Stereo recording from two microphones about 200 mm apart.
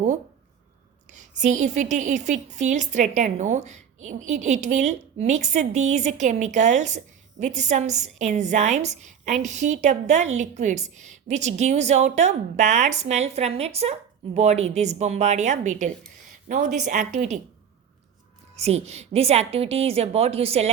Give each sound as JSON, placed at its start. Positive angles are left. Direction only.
{"t": 1.1, "sound": "a woman's voice", "side_deg": -40}
{"t": 18.5, "sound": "a woman's voice", "side_deg": -35}